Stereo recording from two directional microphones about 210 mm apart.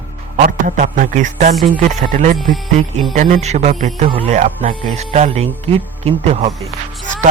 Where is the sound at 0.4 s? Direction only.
40° right (ahead or behind).